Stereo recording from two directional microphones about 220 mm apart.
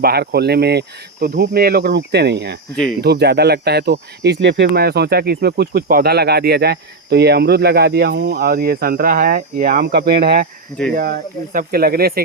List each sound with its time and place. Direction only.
0.0 s speech: 45° right (ahead or behind)
9.8 s speech: 45° right (ahead or behind)